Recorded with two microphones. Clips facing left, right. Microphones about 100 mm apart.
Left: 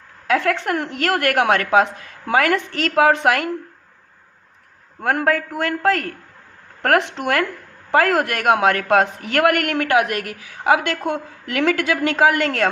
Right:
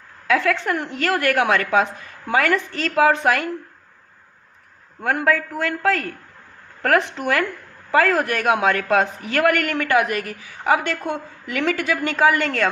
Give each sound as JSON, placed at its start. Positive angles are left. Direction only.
{"t": 0.6, "sound": "a woman's voice", "side_deg": 70}
{"t": 5.1, "sound": "a woman's voice", "side_deg": 70}